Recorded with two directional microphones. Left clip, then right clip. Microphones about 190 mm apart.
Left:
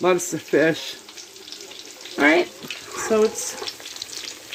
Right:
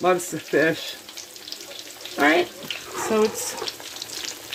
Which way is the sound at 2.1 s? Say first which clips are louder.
Left 1 dB; 25° left (ahead or behind).